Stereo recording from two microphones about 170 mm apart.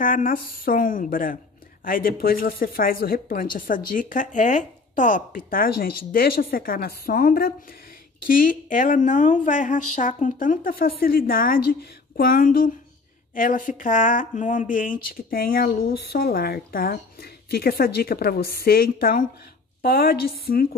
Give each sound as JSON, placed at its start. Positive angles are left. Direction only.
{"t": 0.0, "sound": "a woman's voice", "side_deg": 55}